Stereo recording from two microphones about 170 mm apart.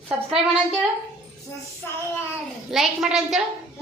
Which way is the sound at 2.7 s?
Centre (ahead or behind).